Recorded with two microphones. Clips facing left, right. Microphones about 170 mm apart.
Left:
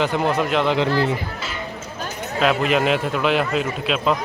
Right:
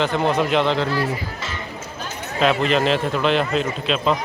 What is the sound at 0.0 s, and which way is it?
Speech, 10° left (ahead or behind).